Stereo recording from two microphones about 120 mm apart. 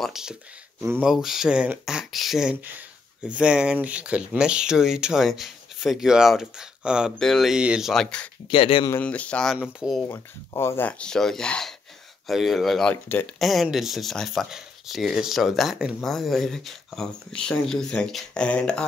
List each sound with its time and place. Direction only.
0.0 s speech: 5° right (ahead or behind)
7.9 s speech: 5° left (ahead or behind)
8.5 s speech: 45° left (ahead or behind)
9.0 s speech: 10° left (ahead or behind)
9.6 s speech: 5° right (ahead or behind)
10.0 s speech: 25° left (ahead or behind); by 12.9 s centre (ahead or behind)
12.9 s speech: 15° left (ahead or behind)
13.4 s speech: centre (ahead or behind)